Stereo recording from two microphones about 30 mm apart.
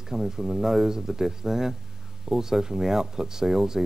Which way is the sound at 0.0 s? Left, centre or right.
Centre.